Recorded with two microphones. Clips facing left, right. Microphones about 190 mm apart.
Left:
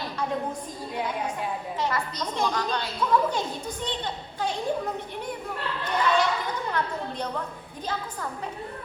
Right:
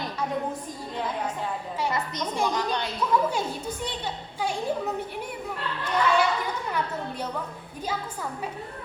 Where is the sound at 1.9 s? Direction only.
20° right (ahead or behind).